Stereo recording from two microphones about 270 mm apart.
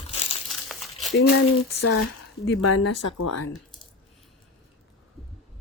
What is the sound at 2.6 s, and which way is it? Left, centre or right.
Speech, left.